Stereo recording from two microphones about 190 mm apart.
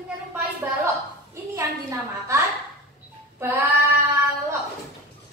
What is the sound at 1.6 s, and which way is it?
Speech, 15° right (ahead or behind).